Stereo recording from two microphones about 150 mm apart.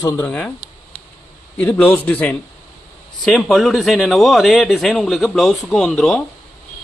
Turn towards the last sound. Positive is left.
turn(degrees=0)  # may be behind; listen again after turning